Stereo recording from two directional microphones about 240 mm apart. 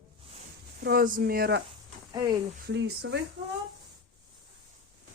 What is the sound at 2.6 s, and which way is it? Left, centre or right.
Speech, right.